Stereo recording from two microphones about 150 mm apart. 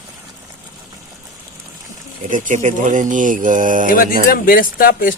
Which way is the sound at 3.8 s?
70° left (ahead or behind).